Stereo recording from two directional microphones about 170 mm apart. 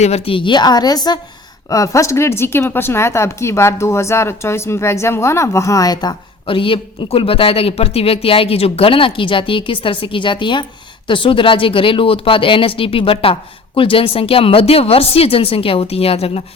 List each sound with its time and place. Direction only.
0.0 s speech: 35° left (ahead or behind)